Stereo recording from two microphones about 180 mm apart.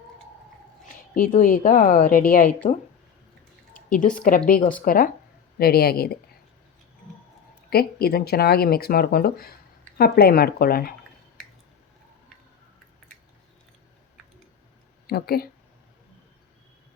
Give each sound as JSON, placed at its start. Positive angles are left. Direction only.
{"t": 1.4, "sound": "a woman's voice", "side_deg": 50}
{"t": 3.9, "sound": "a woman's voice", "side_deg": 50}
{"t": 7.7, "sound": "speech", "side_deg": 60}
{"t": 15.0, "sound": "speech", "side_deg": 60}